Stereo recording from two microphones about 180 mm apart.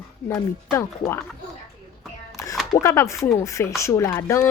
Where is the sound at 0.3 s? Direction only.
20° left (ahead or behind).